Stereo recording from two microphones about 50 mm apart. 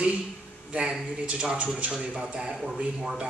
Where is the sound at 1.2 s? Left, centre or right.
Right.